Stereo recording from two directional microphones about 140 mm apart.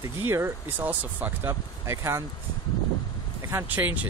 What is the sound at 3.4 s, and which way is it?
Speech, 20° right (ahead or behind).